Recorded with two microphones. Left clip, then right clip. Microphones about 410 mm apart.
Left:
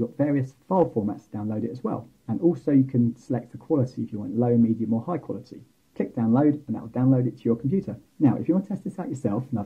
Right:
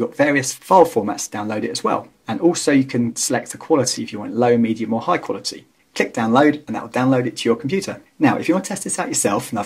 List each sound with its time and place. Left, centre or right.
0.0 s speech: centre